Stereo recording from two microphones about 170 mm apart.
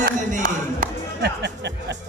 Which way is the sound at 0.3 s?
50° right (ahead or behind).